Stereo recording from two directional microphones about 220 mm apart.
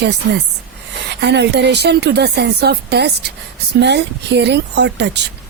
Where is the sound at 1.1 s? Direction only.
50° right (ahead or behind).